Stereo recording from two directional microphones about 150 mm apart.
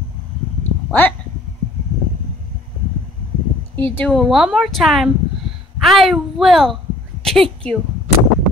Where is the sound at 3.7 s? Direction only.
15° left (ahead or behind).